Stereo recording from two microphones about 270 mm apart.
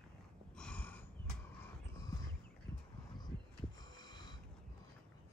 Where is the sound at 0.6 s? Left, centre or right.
Centre.